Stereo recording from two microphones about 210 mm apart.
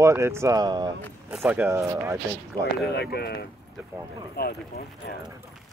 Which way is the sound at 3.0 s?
50° left (ahead or behind).